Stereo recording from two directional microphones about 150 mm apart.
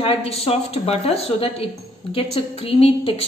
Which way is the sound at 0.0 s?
40° left (ahead or behind).